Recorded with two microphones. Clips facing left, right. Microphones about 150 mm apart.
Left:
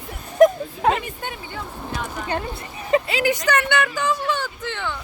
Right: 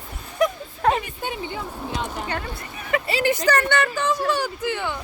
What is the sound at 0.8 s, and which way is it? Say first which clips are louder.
Speech: even; 10° left (ahead or behind).